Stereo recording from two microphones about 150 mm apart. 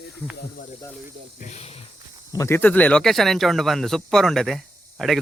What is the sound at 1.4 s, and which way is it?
Speech, 45° left (ahead or behind).